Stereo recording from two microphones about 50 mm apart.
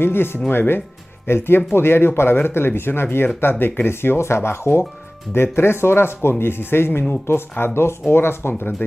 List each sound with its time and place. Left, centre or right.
0.0 s speech: left
4.2 s speech: left